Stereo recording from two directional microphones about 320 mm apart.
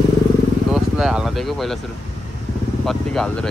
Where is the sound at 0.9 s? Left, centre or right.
Centre.